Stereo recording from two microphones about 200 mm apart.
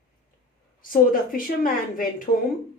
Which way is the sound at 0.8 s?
45° left (ahead or behind).